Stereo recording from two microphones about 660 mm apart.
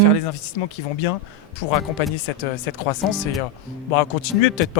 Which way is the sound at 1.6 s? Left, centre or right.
Left.